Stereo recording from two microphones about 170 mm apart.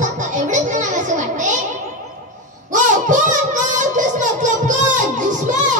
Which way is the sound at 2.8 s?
45° right (ahead or behind).